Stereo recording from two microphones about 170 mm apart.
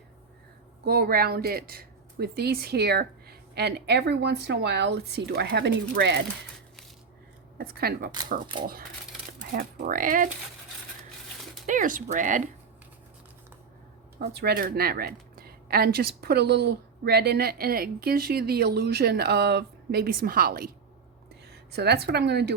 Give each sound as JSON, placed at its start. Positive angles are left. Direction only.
{"t": 0.9, "sound": "speech", "side_deg": -65}
{"t": 7.6, "sound": "speech", "side_deg": -60}
{"t": 9.6, "sound": "speech", "side_deg": -55}
{"t": 11.6, "sound": "speech", "side_deg": -50}
{"t": 14.2, "sound": "speech", "side_deg": -70}
{"t": 21.5, "sound": "a woman's voice", "side_deg": -75}